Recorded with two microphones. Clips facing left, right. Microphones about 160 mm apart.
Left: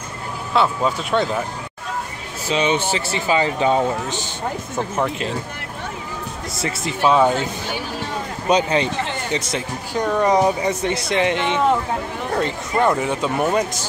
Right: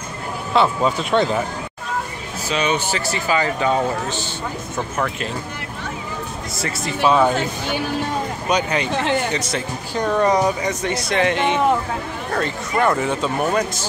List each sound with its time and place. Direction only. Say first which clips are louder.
0.6 s speech: right 1 dB; 5° left (ahead or behind)
2.4 s speech: left 2 dB; 25° left (ahead or behind)
4.9 s speech: left 2 dB; 25° left (ahead or behind)
6.6 s speech: even; 20° left (ahead or behind)
8.5 s speech: left 4 dB; 25° left (ahead or behind)
9.9 s speech: even; 10° left (ahead or behind)
10.3 s speech: left 2 dB; 25° left (ahead or behind)